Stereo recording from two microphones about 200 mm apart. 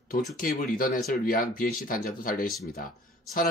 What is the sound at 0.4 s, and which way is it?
Speech, 45° left (ahead or behind).